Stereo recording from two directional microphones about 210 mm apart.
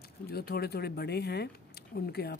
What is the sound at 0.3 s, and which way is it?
Speech, 50° left (ahead or behind).